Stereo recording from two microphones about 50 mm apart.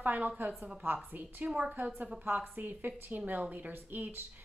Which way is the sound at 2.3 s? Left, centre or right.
Right.